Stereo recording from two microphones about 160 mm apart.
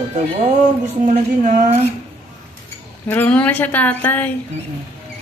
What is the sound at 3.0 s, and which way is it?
Speech, 10° left (ahead or behind).